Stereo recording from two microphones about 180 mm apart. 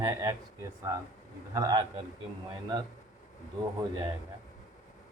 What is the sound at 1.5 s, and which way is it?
Speech, 20° right (ahead or behind).